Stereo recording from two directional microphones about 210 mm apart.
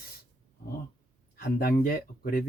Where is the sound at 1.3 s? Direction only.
45° left (ahead or behind).